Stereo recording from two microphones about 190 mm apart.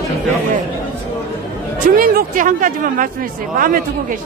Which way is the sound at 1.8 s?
50° right (ahead or behind).